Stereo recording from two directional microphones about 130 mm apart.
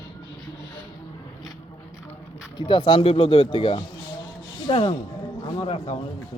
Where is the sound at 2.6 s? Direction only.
40° left (ahead or behind).